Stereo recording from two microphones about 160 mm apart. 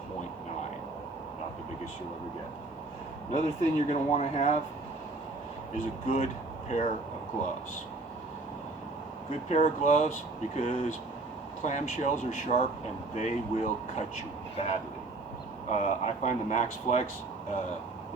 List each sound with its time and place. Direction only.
3.3 s speech: 45° left (ahead or behind)
5.7 s speech: 45° left (ahead or behind)
9.5 s speech: 45° left (ahead or behind)